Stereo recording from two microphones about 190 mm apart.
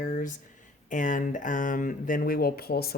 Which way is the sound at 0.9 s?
40° left (ahead or behind).